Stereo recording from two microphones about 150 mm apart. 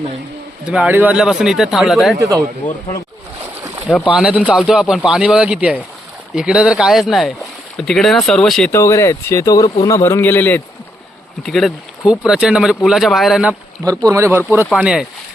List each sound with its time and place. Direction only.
0.6 s speech: 5° right (ahead or behind)
2.1 s speech: 20° right (ahead or behind)
2.6 s a man's voice: 10° left (ahead or behind)
4.1 s speech: 10° right (ahead or behind)
8.7 s a man's voice: 20° left (ahead or behind)
11.4 s speech: centre (ahead or behind)
14.0 s speech: 20° right (ahead or behind)
14.7 s speech: 5° right (ahead or behind)